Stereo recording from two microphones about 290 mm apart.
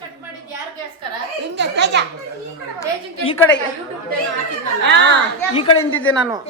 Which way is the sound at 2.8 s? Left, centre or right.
Centre.